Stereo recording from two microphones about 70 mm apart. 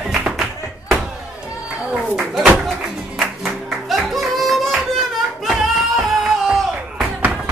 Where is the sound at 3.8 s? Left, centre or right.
Centre.